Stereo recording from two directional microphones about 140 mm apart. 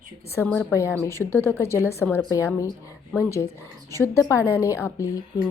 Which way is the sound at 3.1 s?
20° left (ahead or behind).